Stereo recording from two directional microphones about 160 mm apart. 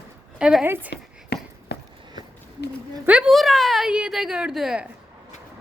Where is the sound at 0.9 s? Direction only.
90° left.